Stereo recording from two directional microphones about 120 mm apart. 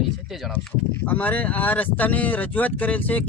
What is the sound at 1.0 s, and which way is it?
Speech, 15° left (ahead or behind).